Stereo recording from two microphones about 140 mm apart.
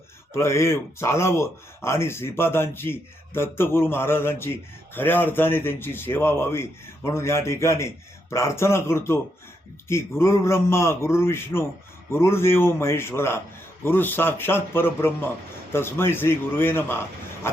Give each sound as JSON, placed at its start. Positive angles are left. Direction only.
{"t": 0.3, "sound": "a man's voice", "side_deg": 20}
{"t": 17.5, "sound": "vehicle", "side_deg": 15}